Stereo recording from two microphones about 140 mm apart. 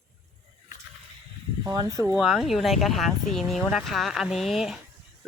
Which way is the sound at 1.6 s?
25° right (ahead or behind).